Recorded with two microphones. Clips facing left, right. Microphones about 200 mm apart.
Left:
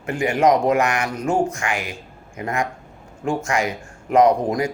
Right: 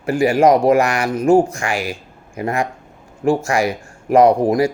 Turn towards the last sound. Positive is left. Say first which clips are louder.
# right 4 dB
turn(degrees=-30)  # may be behind; listen again after turning